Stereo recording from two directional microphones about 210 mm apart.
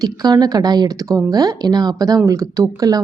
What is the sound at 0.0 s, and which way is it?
Speech, 20° right (ahead or behind).